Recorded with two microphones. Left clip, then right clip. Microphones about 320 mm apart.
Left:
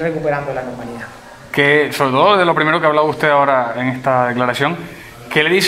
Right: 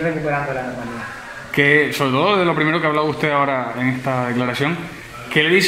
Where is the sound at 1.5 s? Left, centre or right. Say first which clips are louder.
Left 2 dB; left.